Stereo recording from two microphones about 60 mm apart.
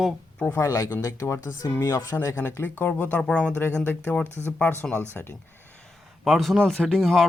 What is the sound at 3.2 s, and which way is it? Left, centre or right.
Speech, centre.